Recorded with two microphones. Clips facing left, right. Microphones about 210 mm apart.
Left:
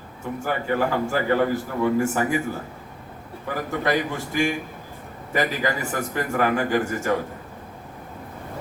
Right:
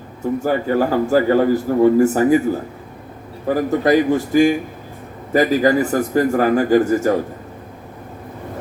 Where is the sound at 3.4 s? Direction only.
40° right (ahead or behind).